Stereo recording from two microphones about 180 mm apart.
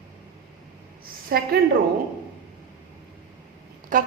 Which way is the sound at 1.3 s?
55° right (ahead or behind).